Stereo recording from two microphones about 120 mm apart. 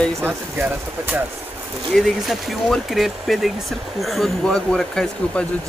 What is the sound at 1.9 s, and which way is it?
Speech, centre (ahead or behind).